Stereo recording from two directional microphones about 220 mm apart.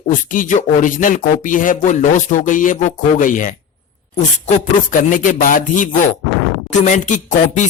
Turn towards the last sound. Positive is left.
turn(degrees=35)  # may be behind; listen again after turning